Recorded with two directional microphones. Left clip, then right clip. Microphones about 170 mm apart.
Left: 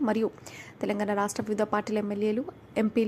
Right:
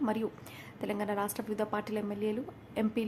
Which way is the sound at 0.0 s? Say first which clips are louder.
Left 6 dB; 25° left (ahead or behind).